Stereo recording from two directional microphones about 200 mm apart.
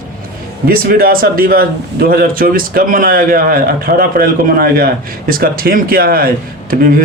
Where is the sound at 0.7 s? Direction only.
45° right (ahead or behind).